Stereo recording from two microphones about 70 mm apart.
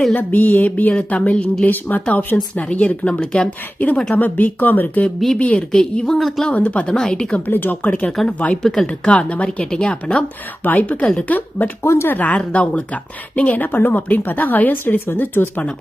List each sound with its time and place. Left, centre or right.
0.2 s speech: left
5.5 s a woman's voice: centre
6.5 s a woman's voice: centre
7.4 s speech: left
8.6 s a woman's voice: centre
8.9 s a woman's voice: centre
10.6 s speech: left
11.0 s a woman's voice: centre
11.3 s speech: left
12.1 s speech: left